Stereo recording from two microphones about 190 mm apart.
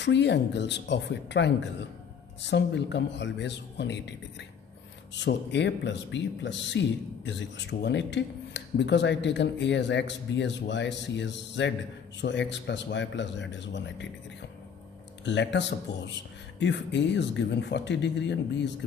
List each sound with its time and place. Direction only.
0.0 s speech: 65° left (ahead or behind)
15.2 s speech: 70° left (ahead or behind)